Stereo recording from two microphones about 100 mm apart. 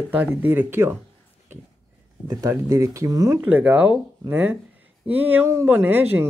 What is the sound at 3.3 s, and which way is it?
Speech, 15° right (ahead or behind).